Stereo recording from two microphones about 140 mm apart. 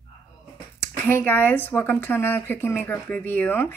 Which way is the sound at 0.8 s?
15° left (ahead or behind).